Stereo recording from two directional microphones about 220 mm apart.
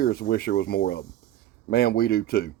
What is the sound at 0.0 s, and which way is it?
Speech, 45° left (ahead or behind).